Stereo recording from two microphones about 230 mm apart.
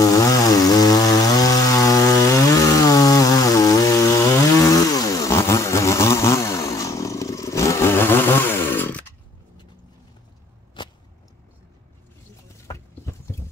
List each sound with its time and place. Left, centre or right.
0.0 s chainsaw: centre
10.8 s a sound: centre
12.6 s clip-clop: centre